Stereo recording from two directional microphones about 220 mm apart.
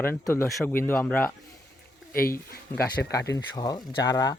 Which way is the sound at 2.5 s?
45° left (ahead or behind).